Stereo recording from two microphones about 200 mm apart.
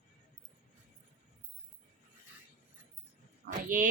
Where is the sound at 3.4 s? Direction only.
45° right (ahead or behind).